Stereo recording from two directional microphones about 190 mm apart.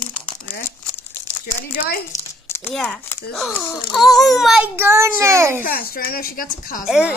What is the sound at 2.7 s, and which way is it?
A child's voice, 5° left (ahead or behind).